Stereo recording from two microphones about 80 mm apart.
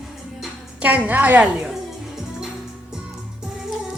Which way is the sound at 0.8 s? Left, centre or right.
Centre.